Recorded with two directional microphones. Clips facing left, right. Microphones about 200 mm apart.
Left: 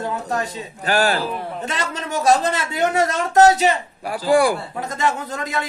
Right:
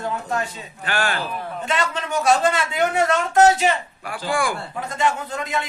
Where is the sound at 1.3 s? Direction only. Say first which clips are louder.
Left 2 dB; 25° left (ahead or behind).